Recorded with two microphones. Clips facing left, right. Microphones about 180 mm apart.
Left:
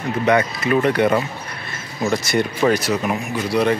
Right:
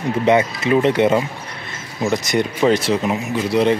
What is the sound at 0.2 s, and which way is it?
Speech, 25° right (ahead or behind).